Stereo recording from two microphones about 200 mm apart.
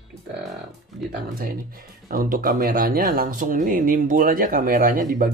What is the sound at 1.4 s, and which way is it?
Speech, 45° right (ahead or behind).